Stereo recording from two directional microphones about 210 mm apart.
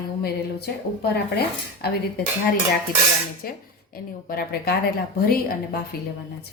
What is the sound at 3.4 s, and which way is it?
Speech, 45° left (ahead or behind).